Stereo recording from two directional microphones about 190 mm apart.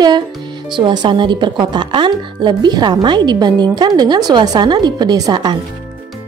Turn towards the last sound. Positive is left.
turn(degrees=-20)  # may be behind; listen again after turning